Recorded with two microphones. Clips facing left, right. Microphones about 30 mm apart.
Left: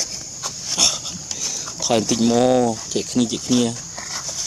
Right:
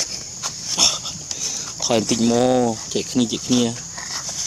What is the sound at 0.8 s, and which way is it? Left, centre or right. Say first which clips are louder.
Dog: right 1 dB; centre.